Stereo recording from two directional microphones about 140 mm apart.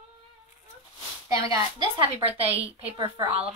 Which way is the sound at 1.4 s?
30° right (ahead or behind).